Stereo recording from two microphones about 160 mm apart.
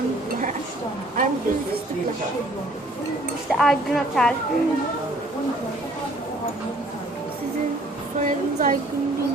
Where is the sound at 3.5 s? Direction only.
Centre (ahead or behind).